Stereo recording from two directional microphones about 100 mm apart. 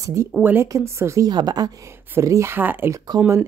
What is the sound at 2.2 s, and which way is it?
Speech, 30° right (ahead or behind).